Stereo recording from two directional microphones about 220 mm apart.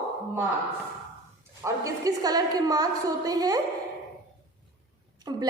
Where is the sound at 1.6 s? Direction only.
15° right (ahead or behind).